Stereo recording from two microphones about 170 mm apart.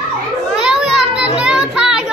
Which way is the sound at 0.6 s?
5° right (ahead or behind).